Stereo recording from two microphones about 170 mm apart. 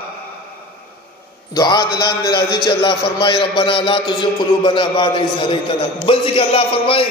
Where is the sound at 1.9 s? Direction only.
65° left (ahead or behind).